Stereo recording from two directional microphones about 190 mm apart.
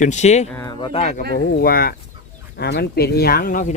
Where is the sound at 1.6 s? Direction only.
50° left (ahead or behind).